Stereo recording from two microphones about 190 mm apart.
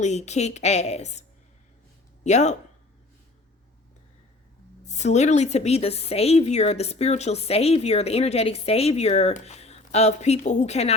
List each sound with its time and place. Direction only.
0.0 s a woman's voice: 35° left (ahead or behind)
2.2 s a woman's voice: 40° left (ahead or behind)
4.9 s a woman's voice: 35° left (ahead or behind)